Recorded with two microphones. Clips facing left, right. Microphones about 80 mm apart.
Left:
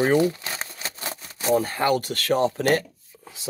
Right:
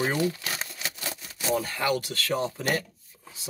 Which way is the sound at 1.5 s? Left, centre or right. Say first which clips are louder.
Left 5 dB; left.